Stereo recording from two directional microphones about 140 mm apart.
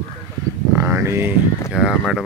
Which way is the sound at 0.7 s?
20° right (ahead or behind).